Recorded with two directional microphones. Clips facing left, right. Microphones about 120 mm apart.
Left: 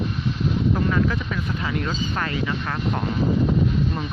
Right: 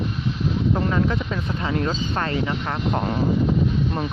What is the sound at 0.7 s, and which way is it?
Speech, 25° right (ahead or behind).